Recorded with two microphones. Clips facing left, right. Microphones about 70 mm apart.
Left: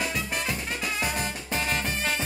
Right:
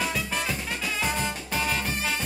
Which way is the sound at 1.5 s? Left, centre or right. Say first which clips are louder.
Left 1 dB; left.